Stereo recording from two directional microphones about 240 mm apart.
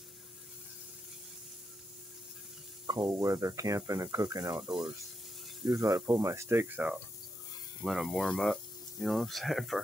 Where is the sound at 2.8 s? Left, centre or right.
Centre.